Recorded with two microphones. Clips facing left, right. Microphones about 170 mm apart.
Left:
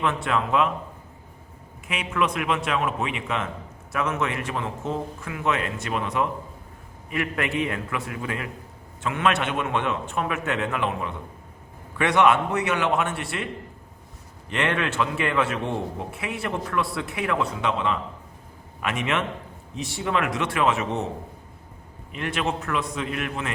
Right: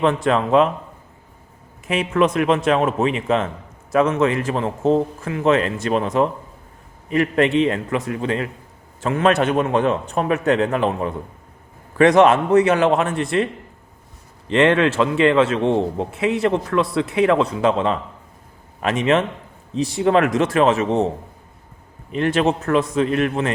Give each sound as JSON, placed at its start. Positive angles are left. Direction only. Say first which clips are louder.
{"t": 0.3, "sound": "a man's voice", "louder": "right 7 dB", "side_deg": -35}
{"t": 1.9, "sound": "a man's voice", "louder": "right 8 dB", "side_deg": -40}
{"t": 14.5, "sound": "a man's voice", "louder": "right 10 dB", "side_deg": -30}
{"t": 22.1, "sound": "a man's voice", "louder": "right 9 dB", "side_deg": -35}